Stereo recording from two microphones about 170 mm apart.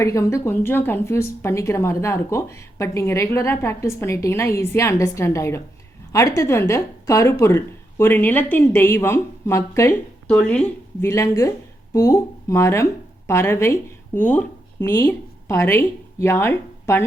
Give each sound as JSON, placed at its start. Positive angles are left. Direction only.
{"t": 0.0, "sound": "speech", "side_deg": 15}
{"t": 11.1, "sound": "a woman's voice", "side_deg": 20}